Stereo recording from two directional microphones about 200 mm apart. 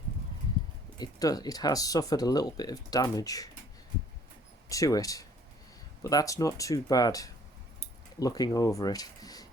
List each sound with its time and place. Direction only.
0.9 s speech: 20° left (ahead or behind)
4.7 s speech: 15° left (ahead or behind)